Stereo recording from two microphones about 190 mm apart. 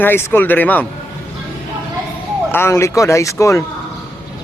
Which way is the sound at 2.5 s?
15° left (ahead or behind).